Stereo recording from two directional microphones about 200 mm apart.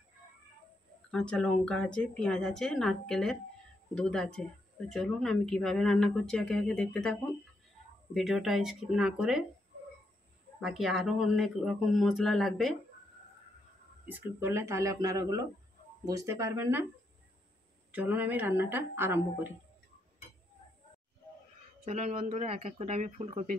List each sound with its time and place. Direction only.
1.1 s speech: 5° left (ahead or behind)
10.6 s speech: centre (ahead or behind)
14.0 s speech: 10° right (ahead or behind)
17.9 s speech: 10° right (ahead or behind)
21.8 s speech: 30° right (ahead or behind)